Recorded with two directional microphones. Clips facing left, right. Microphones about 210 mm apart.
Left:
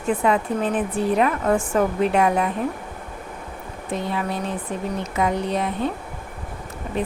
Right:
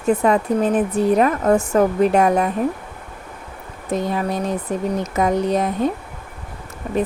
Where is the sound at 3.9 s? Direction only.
40° right (ahead or behind).